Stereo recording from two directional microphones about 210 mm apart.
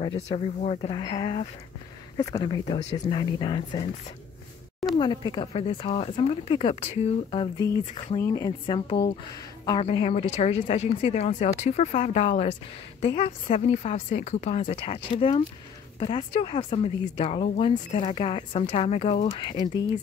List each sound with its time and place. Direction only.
0.0 s speech: 25° left (ahead or behind)
4.9 s speech: 25° left (ahead or behind)